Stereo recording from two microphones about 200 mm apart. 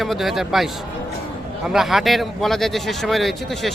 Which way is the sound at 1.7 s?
Centre (ahead or behind).